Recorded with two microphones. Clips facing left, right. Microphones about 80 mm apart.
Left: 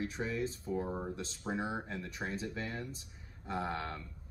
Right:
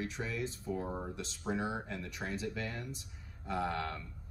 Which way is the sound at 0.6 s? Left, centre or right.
Left.